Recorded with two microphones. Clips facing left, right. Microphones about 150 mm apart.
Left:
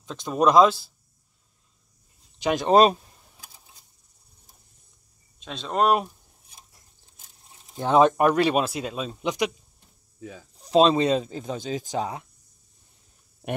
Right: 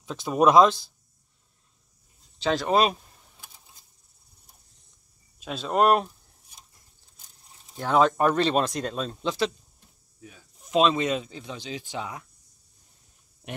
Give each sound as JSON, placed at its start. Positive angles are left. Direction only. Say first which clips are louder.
{"t": 0.0, "sound": "speech", "louder": "right 1 dB", "side_deg": -5}
{"t": 2.3, "sound": "speech", "louder": "left 1 dB", "side_deg": 15}
{"t": 2.7, "sound": "speech", "louder": "left 6 dB", "side_deg": 40}
{"t": 5.4, "sound": "speech", "louder": "right 1 dB", "side_deg": -5}
{"t": 7.7, "sound": "speech", "louder": "left 3 dB", "side_deg": 20}
{"t": 10.6, "sound": "speech", "louder": "left 4 dB", "side_deg": 35}